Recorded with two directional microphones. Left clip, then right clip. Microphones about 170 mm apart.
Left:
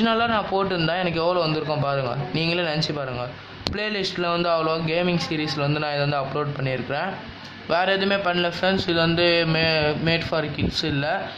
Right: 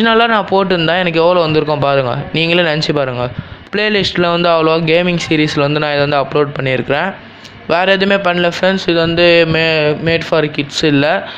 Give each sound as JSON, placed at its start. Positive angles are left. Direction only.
{"t": 0.0, "sound": "speech", "side_deg": -30}